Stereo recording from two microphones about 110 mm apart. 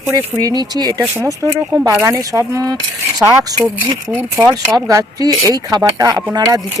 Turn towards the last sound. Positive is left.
turn(degrees=-35)  # may be behind; listen again after turning